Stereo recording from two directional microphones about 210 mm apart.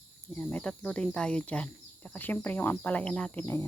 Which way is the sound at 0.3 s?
5° left (ahead or behind).